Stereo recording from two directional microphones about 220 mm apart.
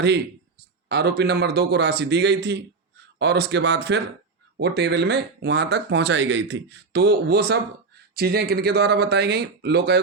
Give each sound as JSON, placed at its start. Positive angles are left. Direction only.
{"t": 0.9, "sound": "speech", "side_deg": -50}